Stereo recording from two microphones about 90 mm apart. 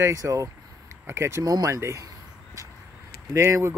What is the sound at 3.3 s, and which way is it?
Speech, 35° right (ahead or behind).